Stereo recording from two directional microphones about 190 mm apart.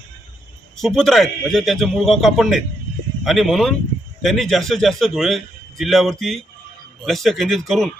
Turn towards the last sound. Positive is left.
turn(degrees=0)  # may be behind; listen again after turning